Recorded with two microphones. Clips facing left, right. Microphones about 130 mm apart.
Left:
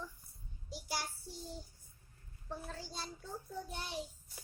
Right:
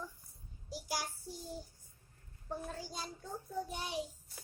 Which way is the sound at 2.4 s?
10° right (ahead or behind).